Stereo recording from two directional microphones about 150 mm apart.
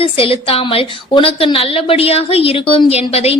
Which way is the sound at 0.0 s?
35° left (ahead or behind).